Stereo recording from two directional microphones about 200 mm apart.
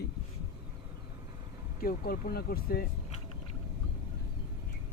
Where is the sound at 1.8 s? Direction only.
45° left (ahead or behind).